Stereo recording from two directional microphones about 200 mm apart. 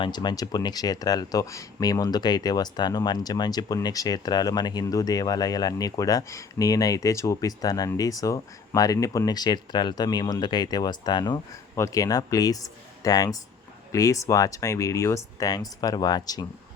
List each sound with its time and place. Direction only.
0.0 s speech: 20° left (ahead or behind)